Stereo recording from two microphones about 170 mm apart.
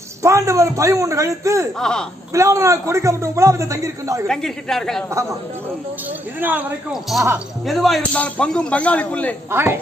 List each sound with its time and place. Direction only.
0.2 s a man's voice: 15° right (ahead or behind)
1.8 s speech: 5° left (ahead or behind)
2.3 s a man's voice: 20° right (ahead or behind)
4.3 s speech: 5° left (ahead or behind)
6.4 s a man's voice: 5° right (ahead or behind)
9.5 s a man's voice: 15° right (ahead or behind)